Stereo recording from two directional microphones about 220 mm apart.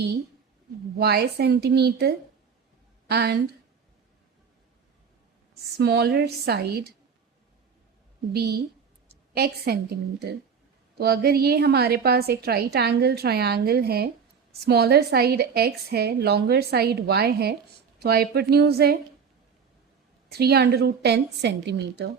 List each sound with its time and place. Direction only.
0.9 s a woman's voice: 45° right (ahead or behind)
5.7 s a woman's voice: 50° right (ahead or behind)
8.3 s a woman's voice: 45° right (ahead or behind)
10.9 s a woman's voice: 45° right (ahead or behind)
20.3 s a woman's voice: 45° right (ahead or behind)